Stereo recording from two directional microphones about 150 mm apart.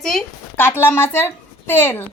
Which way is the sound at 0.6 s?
15° left (ahead or behind).